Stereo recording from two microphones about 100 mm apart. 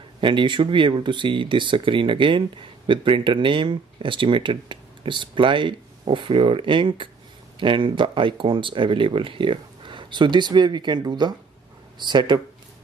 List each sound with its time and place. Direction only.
0.2 s speech: 55° right (ahead or behind)